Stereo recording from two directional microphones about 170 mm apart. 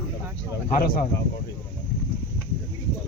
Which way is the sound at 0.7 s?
55° left (ahead or behind).